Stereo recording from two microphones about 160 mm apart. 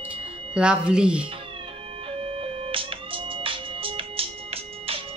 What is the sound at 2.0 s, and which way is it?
Music, 35° right (ahead or behind).